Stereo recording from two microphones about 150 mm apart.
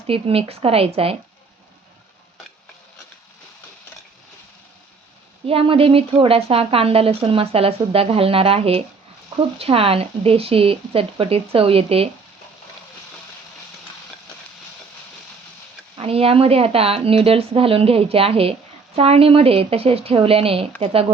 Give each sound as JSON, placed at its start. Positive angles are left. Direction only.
{"t": 0.1, "sound": "a woman's voice", "side_deg": -40}
{"t": 5.5, "sound": "a woman's voice", "side_deg": -40}
{"t": 16.0, "sound": "a woman's voice", "side_deg": -40}